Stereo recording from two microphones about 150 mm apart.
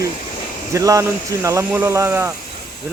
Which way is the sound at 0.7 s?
20° right (ahead or behind).